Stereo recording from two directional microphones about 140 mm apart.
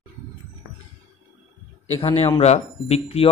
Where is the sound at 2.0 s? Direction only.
45° left (ahead or behind).